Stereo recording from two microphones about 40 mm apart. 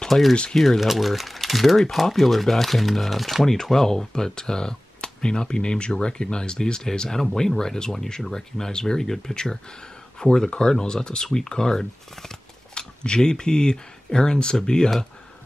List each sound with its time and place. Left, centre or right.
0.3 s speech: centre
0.6 s speech: centre
3.6 s speech: centre